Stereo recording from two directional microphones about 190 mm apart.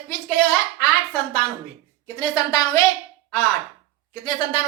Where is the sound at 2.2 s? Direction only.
20° left (ahead or behind).